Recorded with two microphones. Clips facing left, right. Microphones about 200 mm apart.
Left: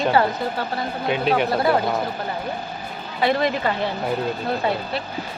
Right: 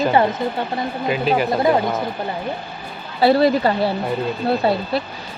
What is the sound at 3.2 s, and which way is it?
Speech, 35° right (ahead or behind).